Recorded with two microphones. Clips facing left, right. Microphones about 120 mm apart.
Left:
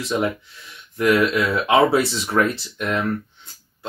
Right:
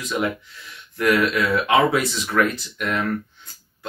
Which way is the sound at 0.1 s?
30° left (ahead or behind).